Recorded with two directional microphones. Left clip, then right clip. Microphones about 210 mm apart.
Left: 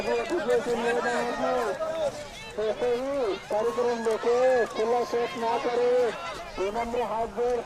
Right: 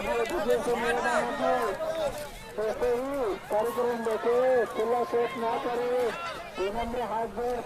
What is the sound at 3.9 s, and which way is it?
Speech, 50° left (ahead or behind).